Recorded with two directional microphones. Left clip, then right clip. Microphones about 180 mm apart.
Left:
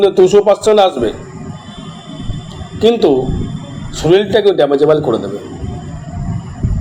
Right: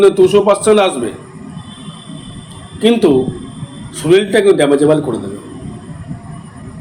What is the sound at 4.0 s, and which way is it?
Speech, 10° left (ahead or behind).